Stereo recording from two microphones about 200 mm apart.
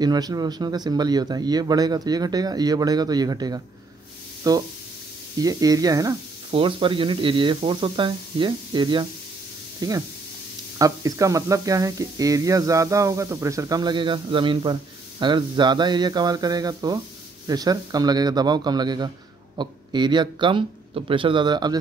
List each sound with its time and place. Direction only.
0.0 s speech: 20° right (ahead or behind)